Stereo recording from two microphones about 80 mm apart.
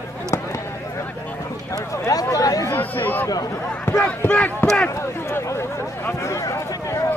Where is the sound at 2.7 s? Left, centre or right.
Left.